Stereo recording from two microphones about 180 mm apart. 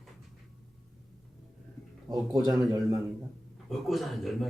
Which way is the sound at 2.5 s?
20° right (ahead or behind).